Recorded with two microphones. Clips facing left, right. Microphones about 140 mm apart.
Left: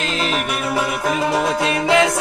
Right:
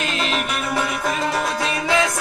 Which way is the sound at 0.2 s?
5° left (ahead or behind).